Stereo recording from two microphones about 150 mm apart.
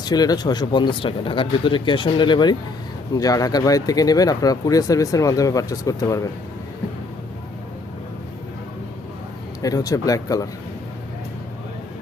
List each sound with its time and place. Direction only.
0.0 s speech: 25° left (ahead or behind)
9.6 s speech: 25° left (ahead or behind)